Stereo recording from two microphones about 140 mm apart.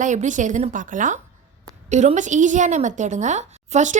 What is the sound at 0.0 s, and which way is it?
A woman's voice, 60° right (ahead or behind).